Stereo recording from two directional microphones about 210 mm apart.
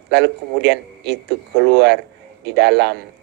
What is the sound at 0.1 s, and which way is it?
A man's voice, 55° right (ahead or behind).